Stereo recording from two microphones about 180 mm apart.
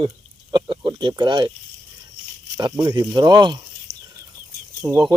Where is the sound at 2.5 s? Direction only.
25° right (ahead or behind).